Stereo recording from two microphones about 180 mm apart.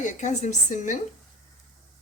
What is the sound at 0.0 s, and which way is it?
Speech, 40° left (ahead or behind).